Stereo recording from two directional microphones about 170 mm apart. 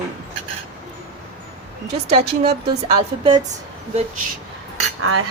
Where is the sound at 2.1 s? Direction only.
35° right (ahead or behind).